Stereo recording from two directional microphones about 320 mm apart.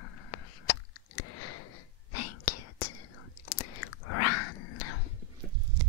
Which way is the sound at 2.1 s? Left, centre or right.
Left.